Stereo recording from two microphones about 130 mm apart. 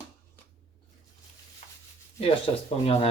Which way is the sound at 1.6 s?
55° left (ahead or behind).